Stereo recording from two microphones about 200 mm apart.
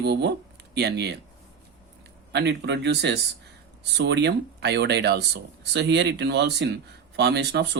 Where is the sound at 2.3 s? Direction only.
55° right (ahead or behind).